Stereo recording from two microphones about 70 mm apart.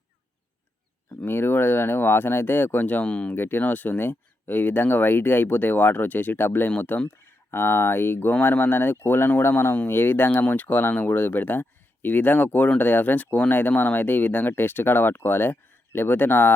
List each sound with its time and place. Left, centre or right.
1.2 s speech: left; by 3.3 s centre
3.3 s speech: left